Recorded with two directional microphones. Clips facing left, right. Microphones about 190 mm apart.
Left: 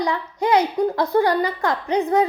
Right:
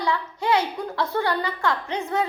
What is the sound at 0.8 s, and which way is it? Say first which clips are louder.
A child's voice: left 7 dB; 35° left (ahead or behind).